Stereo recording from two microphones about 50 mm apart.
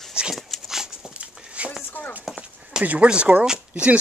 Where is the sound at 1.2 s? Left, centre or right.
Right.